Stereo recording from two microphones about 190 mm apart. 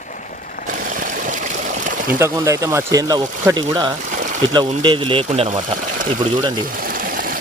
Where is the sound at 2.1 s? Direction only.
15° right (ahead or behind).